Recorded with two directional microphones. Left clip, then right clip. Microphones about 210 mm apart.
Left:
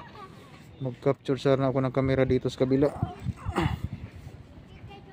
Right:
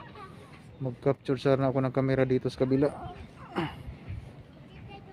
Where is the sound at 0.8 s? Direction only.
15° left (ahead or behind).